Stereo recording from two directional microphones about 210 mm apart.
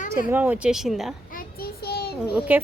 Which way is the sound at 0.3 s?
10° right (ahead or behind).